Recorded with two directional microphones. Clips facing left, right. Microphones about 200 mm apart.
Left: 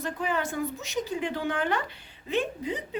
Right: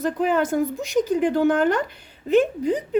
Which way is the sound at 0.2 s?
50° right (ahead or behind).